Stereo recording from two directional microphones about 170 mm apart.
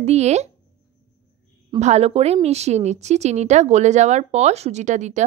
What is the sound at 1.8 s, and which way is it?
Speech, 40° right (ahead or behind).